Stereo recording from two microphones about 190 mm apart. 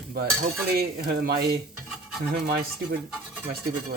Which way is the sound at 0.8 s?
55° right (ahead or behind).